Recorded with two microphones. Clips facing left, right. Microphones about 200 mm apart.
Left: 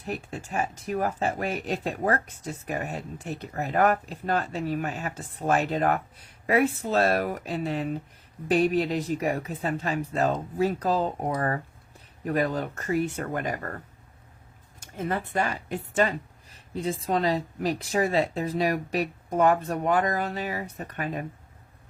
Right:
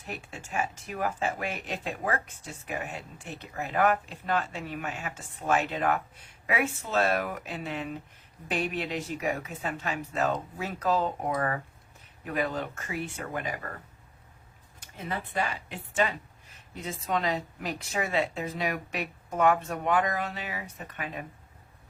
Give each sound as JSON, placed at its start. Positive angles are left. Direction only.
{"t": 0.0, "sound": "speech", "side_deg": 40}
{"t": 14.8, "sound": "speech", "side_deg": 45}